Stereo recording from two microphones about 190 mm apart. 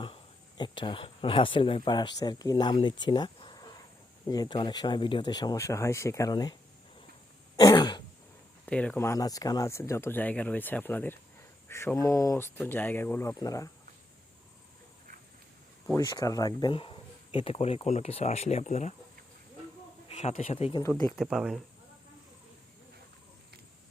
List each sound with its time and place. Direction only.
0.0 s speech: 25° left (ahead or behind)
7.6 s speech: 20° left (ahead or behind)
8.6 s speech: 5° left (ahead or behind)
16.0 s speech: 20° left (ahead or behind); by 18.9 s 40° left (ahead or behind)
20.1 s speech: 35° left (ahead or behind)
21.1 s speech: centre (ahead or behind)